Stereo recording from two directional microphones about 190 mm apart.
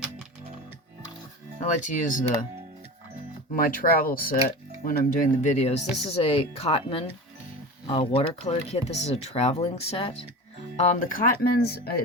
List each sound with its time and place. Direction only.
1.8 s speech: 45° left (ahead or behind)
3.5 s speech: 50° left (ahead or behind)